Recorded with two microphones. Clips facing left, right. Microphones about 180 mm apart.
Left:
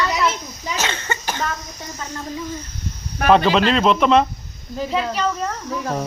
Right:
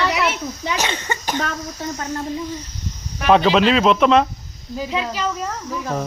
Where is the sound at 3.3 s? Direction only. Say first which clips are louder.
Right 1 dB; centre (ahead or behind).